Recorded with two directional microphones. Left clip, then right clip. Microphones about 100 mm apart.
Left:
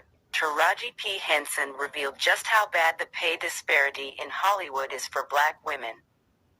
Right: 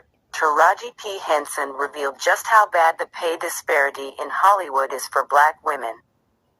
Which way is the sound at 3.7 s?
50° right (ahead or behind).